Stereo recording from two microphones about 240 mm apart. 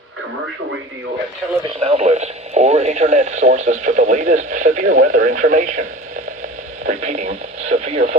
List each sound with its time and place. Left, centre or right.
1.8 s speech: right